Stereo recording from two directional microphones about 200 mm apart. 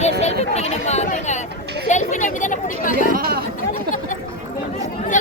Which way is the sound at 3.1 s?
50° right (ahead or behind).